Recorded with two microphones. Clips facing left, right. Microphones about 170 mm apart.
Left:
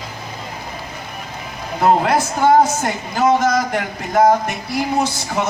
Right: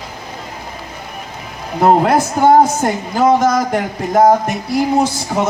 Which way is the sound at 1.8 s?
50° right (ahead or behind).